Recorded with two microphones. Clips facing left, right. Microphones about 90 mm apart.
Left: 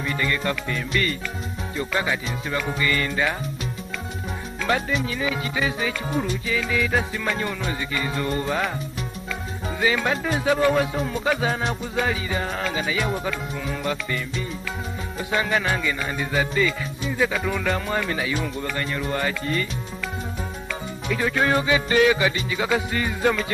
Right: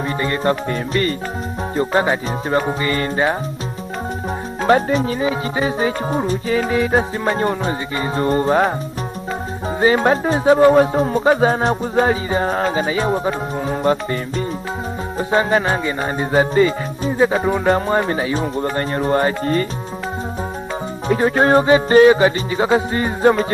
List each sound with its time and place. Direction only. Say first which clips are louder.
0.2 s speech: right 8 dB; 35° right (ahead or behind)
4.6 s speech: right 9 dB; 40° right (ahead or behind)
9.8 s speech: right 8 dB; 40° right (ahead or behind)
21.1 s speech: right 8 dB; 40° right (ahead or behind)